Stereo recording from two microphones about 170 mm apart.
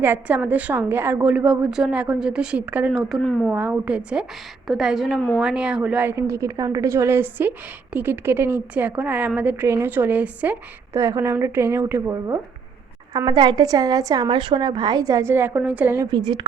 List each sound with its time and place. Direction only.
0.0 s a woman's voice: 10° right (ahead or behind)
3.5 s a woman's voice: 10° right (ahead or behind)
13.1 s a woman's voice: 25° right (ahead or behind)
16.1 s a woman's voice: 25° right (ahead or behind)